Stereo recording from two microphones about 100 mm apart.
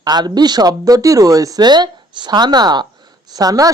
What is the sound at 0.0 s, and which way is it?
Speech, 45° right (ahead or behind).